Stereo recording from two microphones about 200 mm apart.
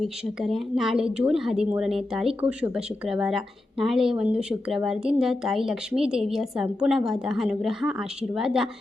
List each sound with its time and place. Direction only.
0.0 s speech: centre (ahead or behind)